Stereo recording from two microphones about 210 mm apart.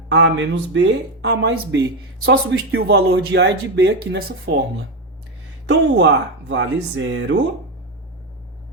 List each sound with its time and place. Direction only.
0.1 s speech: 65° right (ahead or behind)
5.6 s speech: 60° right (ahead or behind)